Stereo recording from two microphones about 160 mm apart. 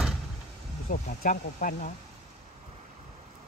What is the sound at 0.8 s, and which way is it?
Speech, 60° left (ahead or behind).